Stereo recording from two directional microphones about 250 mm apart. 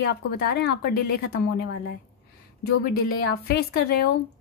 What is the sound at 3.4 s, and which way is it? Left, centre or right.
Speech, left.